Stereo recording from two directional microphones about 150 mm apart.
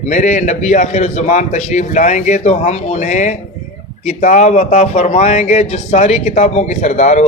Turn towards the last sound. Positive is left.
turn(degrees=50)  # may be behind; listen again after turning